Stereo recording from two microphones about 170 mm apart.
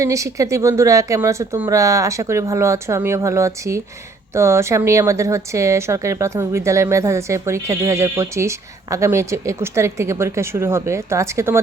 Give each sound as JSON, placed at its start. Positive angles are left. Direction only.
{"t": 0.0, "sound": "speech", "side_deg": -20}